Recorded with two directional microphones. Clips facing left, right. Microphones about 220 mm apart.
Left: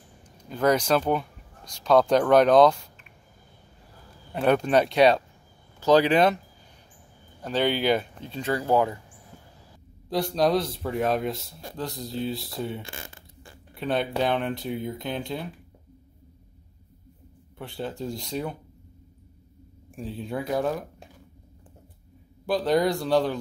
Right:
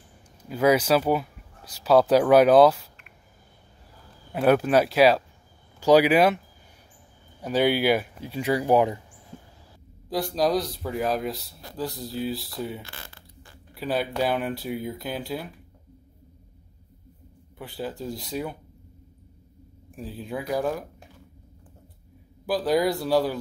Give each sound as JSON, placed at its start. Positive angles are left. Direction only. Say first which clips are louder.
{"t": 0.2, "sound": "speech", "louder": "right 2 dB", "side_deg": -5}
{"t": 4.3, "sound": "speech", "louder": "right 2 dB", "side_deg": -5}
{"t": 7.4, "sound": "speech", "louder": "right 2 dB", "side_deg": -10}
{"t": 9.3, "sound": "a sound", "louder": "right 7 dB", "side_deg": -25}
{"t": 10.0, "sound": "speech", "louder": "left 1 dB", "side_deg": 0}
{"t": 12.8, "sound": "a sound", "louder": "left 4 dB", "side_deg": 25}
{"t": 13.7, "sound": "speech", "louder": "even", "side_deg": -5}
{"t": 17.6, "sound": "speech", "louder": "even", "side_deg": 0}
{"t": 20.0, "sound": "speech", "louder": "left 1 dB", "side_deg": 0}
{"t": 22.5, "sound": "speech", "louder": "even", "side_deg": -5}